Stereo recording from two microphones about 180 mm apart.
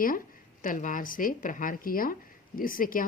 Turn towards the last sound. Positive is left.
turn(degrees=50)  # may be behind; listen again after turning